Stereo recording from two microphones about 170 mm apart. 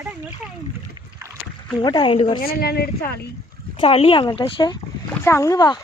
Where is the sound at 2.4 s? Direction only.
65° left (ahead or behind).